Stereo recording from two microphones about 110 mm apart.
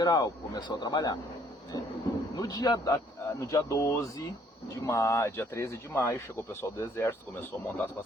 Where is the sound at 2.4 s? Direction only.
35° left (ahead or behind); by 7.9 s 20° left (ahead or behind).